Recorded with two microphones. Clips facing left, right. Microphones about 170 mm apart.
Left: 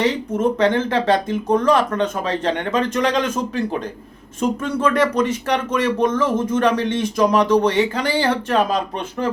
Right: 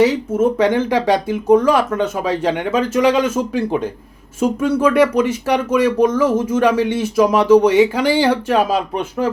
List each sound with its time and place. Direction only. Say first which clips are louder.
0.0 s speech: right 5 dB; 10° right (ahead or behind)